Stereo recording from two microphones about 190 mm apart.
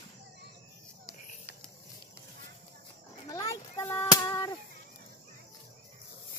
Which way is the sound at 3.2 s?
20° left (ahead or behind).